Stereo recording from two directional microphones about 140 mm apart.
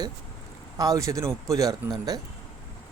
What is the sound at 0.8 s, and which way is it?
Speech, 25° right (ahead or behind).